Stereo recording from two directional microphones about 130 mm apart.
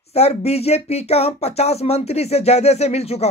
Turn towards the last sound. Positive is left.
turn(degrees=55)  # may be behind; listen again after turning